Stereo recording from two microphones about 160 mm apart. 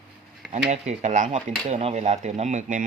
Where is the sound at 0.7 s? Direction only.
50° right (ahead or behind).